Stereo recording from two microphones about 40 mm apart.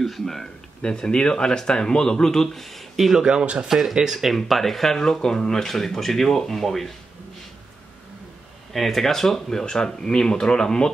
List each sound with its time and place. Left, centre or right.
0.0 s speech: centre
0.8 s speech: left; by 3.2 s centre
3.2 s speech: right
3.6 s speech: centre
3.9 s speech: centre
4.4 s speech: centre
8.7 s speech: centre